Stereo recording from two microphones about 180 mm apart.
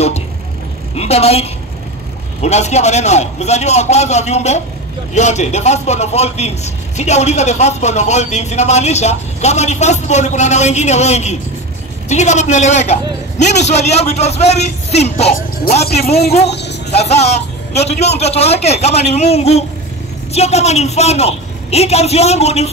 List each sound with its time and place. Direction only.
0.9 s a woman's voice: 35° left (ahead or behind)